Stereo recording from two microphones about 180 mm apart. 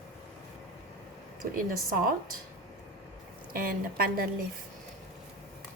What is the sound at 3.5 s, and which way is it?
Speech, 55° right (ahead or behind).